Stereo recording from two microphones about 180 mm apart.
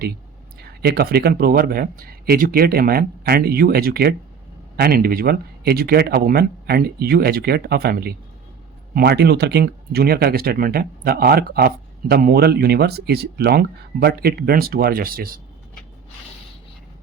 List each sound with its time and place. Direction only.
0.6 s speech: 60° right (ahead or behind)